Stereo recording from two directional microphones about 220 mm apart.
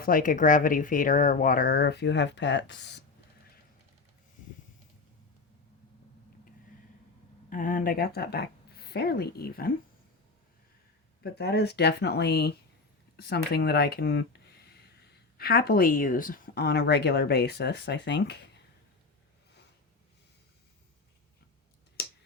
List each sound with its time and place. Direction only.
0.0 s speech: 40° left (ahead or behind)
7.5 s speech: 35° left (ahead or behind)
11.2 s speech: 45° left (ahead or behind)